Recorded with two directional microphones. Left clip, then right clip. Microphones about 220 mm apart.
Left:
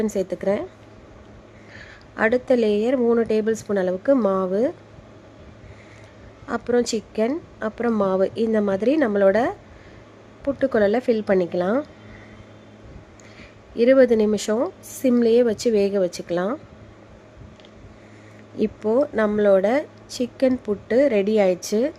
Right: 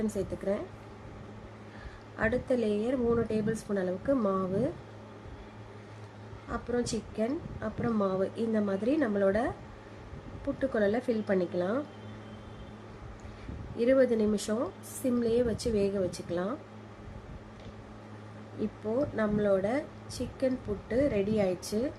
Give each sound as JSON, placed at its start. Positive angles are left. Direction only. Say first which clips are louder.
{"t": 0.0, "sound": "speech", "louder": "left 10 dB", "side_deg": 35}
{"t": 2.1, "sound": "speech", "louder": "left 10 dB", "side_deg": 35}
{"t": 6.5, "sound": "speech", "louder": "left 11 dB", "side_deg": 35}
{"t": 13.7, "sound": "speech", "louder": "left 10 dB", "side_deg": 35}
{"t": 18.6, "sound": "speech", "louder": "left 11 dB", "side_deg": 35}